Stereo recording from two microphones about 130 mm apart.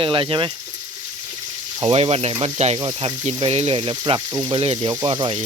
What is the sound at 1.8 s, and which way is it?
Speech, 45° right (ahead or behind).